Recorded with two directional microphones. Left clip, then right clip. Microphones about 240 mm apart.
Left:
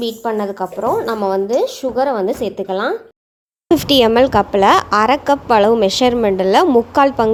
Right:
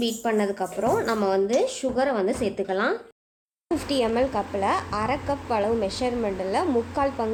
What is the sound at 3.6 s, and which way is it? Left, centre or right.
Speech, left.